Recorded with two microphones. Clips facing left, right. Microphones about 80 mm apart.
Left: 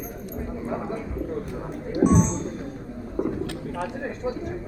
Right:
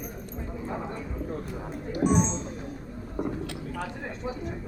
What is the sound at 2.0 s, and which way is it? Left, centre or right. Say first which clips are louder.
Music: left 5 dB; centre.